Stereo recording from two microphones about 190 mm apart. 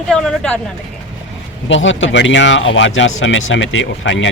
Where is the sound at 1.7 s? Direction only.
80° left.